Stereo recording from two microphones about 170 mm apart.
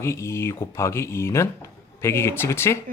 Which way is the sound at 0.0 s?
15° left (ahead or behind).